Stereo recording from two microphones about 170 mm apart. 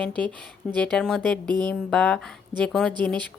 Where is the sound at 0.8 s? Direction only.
5° left (ahead or behind).